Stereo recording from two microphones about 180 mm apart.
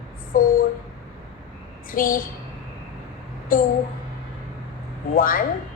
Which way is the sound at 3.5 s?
50° left (ahead or behind).